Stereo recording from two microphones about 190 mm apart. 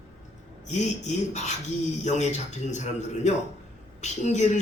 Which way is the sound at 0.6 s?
35° left (ahead or behind).